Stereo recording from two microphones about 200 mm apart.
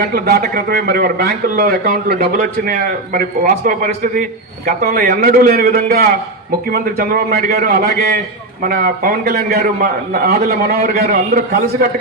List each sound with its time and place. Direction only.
0.0 s a man's voice: 50° right (ahead or behind)